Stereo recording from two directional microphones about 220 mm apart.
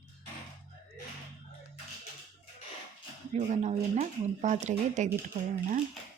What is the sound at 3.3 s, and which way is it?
Speech, 30° right (ahead or behind).